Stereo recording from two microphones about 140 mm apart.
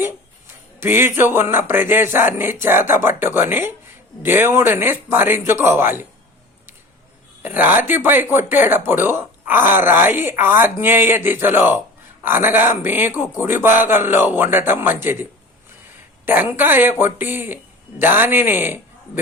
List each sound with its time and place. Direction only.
0.8 s speech: 15° right (ahead or behind)
7.4 s speech: 15° right (ahead or behind)